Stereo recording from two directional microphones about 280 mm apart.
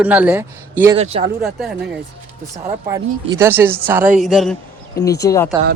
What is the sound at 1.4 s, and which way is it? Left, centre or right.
Speech, centre.